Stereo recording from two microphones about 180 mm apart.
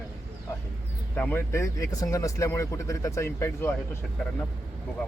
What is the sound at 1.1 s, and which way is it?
Speech, 10° left (ahead or behind).